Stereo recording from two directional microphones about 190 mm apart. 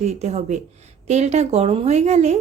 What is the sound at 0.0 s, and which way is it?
A woman's voice, 35° right (ahead or behind).